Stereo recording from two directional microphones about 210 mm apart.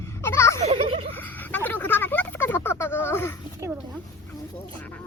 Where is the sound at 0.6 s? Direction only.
25° right (ahead or behind).